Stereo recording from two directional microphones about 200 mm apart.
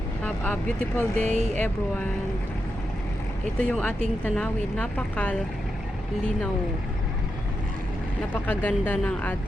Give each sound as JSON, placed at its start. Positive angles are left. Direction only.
{"t": 0.3, "sound": "speech", "side_deg": 5}
{"t": 1.2, "sound": "speech", "side_deg": -35}
{"t": 1.5, "sound": "speech", "side_deg": 10}
{"t": 3.6, "sound": "speech", "side_deg": 10}
{"t": 8.3, "sound": "speech", "side_deg": 10}